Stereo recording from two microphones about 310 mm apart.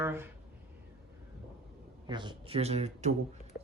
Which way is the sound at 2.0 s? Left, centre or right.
Centre.